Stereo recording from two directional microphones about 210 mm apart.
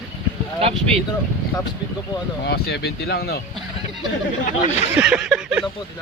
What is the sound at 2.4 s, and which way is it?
A man's voice, 55° left (ahead or behind).